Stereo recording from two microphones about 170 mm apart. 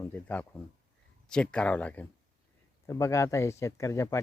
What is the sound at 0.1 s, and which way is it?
Speech, 10° left (ahead or behind).